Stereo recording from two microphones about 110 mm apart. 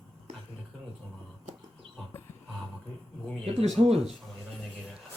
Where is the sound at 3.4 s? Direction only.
65° right (ahead or behind).